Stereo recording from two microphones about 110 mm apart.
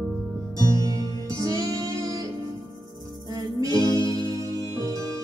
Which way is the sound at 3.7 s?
40° left (ahead or behind).